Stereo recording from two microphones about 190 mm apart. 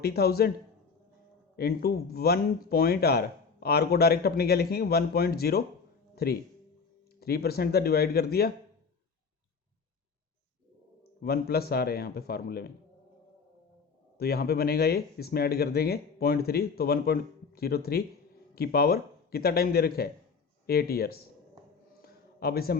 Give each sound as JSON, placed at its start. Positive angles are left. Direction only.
{"t": 0.0, "sound": "speech", "side_deg": 55}
{"t": 1.5, "sound": "speech", "side_deg": 55}
{"t": 11.2, "sound": "speech", "side_deg": 55}
{"t": 14.2, "sound": "a man's voice", "side_deg": 55}
{"t": 22.0, "sound": "a sound", "side_deg": 55}